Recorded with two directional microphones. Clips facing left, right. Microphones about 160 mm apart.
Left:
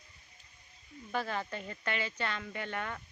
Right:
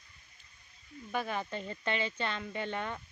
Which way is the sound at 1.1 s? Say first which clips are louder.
Right 1 dB; 15° right (ahead or behind).